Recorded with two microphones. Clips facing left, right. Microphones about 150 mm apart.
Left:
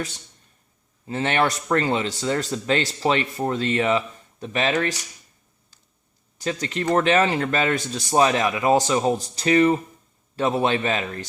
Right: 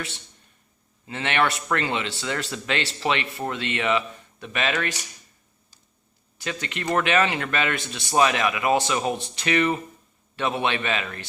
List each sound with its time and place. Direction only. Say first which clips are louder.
1.0 s a man's voice: left 2 dB; 35° left (ahead or behind)
6.4 s speech: left 5 dB; 35° left (ahead or behind)